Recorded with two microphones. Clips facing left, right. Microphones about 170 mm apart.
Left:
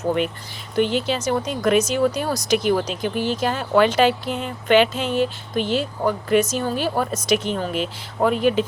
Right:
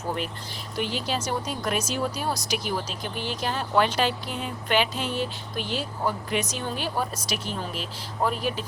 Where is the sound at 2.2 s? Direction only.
55° left (ahead or behind).